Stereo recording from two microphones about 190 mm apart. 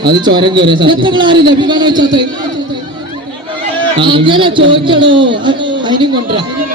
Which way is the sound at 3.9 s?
25° right (ahead or behind).